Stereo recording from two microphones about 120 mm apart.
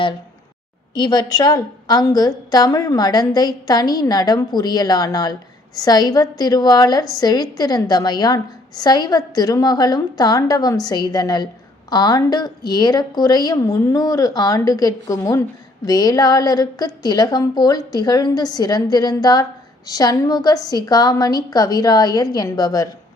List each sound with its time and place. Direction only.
0.9 s a woman's voice: 35° left (ahead or behind)